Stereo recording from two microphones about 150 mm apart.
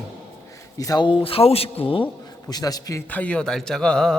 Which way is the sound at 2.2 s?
25° left (ahead or behind).